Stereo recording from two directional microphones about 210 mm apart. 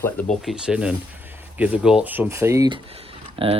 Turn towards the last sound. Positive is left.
turn(degrees=-25)  # may be behind; listen again after turning